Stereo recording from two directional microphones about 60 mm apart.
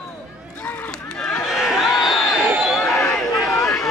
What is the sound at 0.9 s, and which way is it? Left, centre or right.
Run, centre.